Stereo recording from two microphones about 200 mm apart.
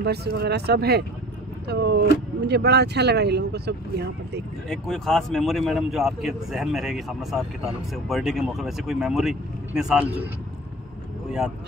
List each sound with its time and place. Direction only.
0.0 s speech: 55° right (ahead or behind)
4.6 s speech: centre (ahead or behind)